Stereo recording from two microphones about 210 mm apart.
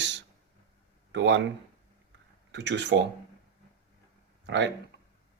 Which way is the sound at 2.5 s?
55° right (ahead or behind).